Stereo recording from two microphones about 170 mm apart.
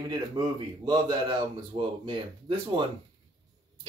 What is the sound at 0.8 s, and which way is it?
Speech, 25° right (ahead or behind).